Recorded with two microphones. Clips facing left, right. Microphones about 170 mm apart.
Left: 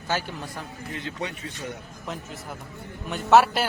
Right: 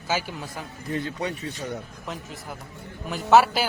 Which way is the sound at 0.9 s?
35° right (ahead or behind).